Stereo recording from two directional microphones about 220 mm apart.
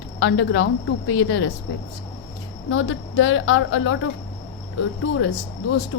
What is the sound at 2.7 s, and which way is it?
Speech, 60° left (ahead or behind).